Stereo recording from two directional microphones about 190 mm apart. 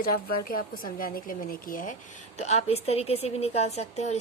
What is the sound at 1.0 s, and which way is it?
Speech, 50° left (ahead or behind).